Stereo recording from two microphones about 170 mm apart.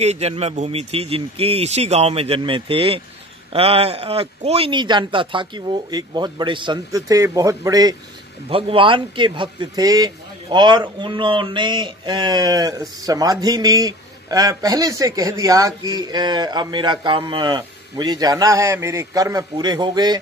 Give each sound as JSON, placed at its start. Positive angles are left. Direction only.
{"t": 0.0, "sound": "a man's voice", "side_deg": -40}
{"t": 8.5, "sound": "a man's voice", "side_deg": -35}